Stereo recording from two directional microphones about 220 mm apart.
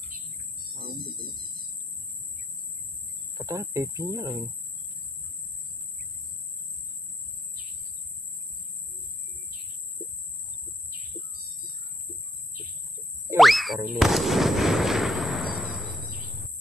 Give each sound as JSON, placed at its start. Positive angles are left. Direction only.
{"t": 0.7, "sound": "a sound", "side_deg": -45}
{"t": 3.3, "sound": "speech", "side_deg": -15}
{"t": 13.4, "sound": "boing", "side_deg": 0}
{"t": 13.8, "sound": "artillery fire", "side_deg": 0}